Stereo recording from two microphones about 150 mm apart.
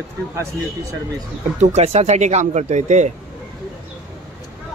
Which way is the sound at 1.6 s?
45° right (ahead or behind).